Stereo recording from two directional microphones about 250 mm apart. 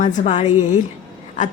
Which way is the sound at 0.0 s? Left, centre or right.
Left.